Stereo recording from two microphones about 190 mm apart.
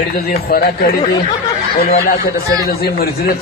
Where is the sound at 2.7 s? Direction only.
55° left (ahead or behind).